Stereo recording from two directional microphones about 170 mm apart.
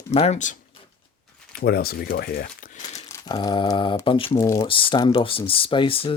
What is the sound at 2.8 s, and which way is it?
Crumpling, 25° left (ahead or behind).